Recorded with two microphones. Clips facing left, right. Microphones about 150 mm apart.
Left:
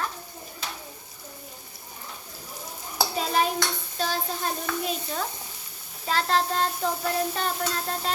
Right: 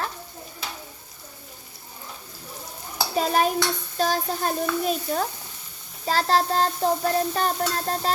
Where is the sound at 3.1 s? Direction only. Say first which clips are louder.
Right 4 dB; 45° right (ahead or behind).